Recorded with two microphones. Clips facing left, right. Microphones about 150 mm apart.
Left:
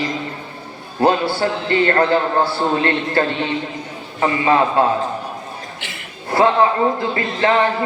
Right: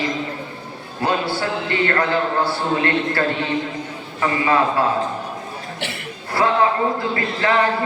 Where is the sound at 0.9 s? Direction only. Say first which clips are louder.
Left 5 dB; 30° left (ahead or behind).